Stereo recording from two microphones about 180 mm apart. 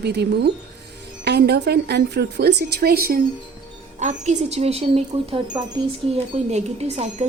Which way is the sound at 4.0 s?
40° right (ahead or behind).